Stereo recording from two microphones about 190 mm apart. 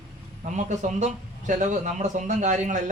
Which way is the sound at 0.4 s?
40° right (ahead or behind).